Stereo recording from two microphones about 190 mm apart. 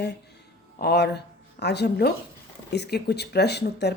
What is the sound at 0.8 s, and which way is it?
A woman's voice, 55° left (ahead or behind).